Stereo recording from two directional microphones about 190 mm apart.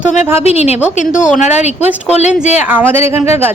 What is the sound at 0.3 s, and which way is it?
Speech, 35° left (ahead or behind).